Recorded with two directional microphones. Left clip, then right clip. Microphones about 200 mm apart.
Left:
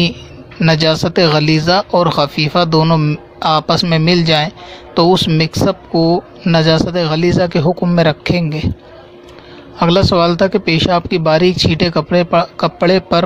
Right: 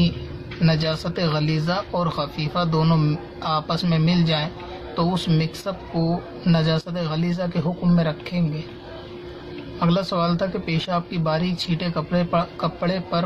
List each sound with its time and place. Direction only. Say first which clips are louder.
0.6 s speech: left 11 dB; 50° left (ahead or behind)
9.8 s speech: left 11 dB; 50° left (ahead or behind)